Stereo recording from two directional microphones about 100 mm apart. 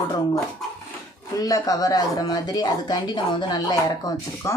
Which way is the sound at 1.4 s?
35° left (ahead or behind).